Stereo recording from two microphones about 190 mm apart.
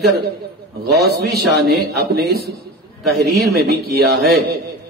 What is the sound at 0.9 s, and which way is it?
A man's voice, 55° right (ahead or behind).